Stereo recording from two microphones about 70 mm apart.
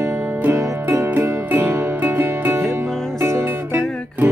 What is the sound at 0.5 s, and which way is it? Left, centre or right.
Music, right.